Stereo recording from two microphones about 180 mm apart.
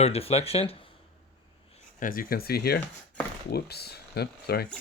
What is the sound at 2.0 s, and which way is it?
Speech, 50° left (ahead or behind).